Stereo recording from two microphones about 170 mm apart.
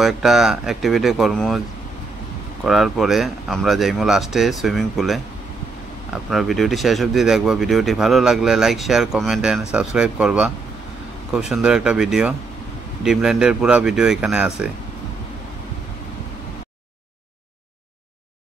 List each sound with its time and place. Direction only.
0.0 s speech: centre (ahead or behind)
2.6 s speech: centre (ahead or behind)
6.3 s speech: centre (ahead or behind)